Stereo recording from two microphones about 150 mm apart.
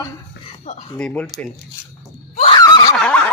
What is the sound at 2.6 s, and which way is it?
Snicker, 25° left (ahead or behind).